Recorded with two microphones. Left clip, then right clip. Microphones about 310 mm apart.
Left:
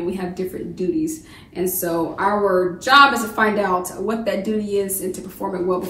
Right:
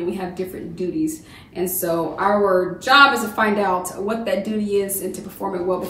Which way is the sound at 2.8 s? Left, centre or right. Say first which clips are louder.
Left 1 dB; centre.